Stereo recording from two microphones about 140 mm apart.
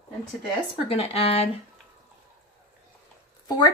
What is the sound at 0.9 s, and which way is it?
Speech, 45° left (ahead or behind).